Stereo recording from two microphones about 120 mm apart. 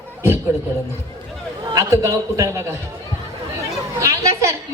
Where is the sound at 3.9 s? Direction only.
25° right (ahead or behind).